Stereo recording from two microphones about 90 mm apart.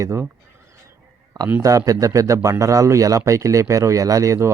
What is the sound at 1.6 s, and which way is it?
A man's voice, 40° right (ahead or behind).